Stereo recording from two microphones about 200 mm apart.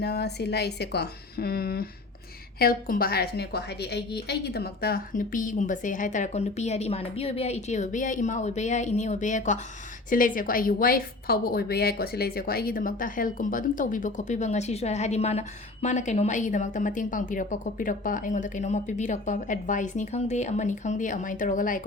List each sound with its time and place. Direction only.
0.0 s a woman's voice: 55° left (ahead or behind)